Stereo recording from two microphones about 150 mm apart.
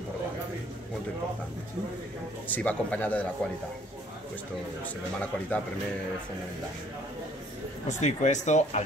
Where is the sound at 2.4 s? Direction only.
10° left (ahead or behind).